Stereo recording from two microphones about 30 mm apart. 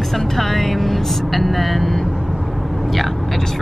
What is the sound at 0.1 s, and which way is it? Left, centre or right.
Vehicle, centre.